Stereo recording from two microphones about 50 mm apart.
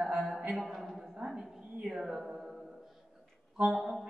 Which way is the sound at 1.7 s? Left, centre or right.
Centre.